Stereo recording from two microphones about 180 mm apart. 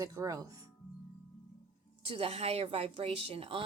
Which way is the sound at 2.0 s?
30° right (ahead or behind).